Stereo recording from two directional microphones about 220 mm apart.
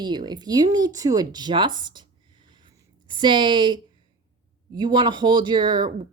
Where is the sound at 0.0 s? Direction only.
20° right (ahead or behind).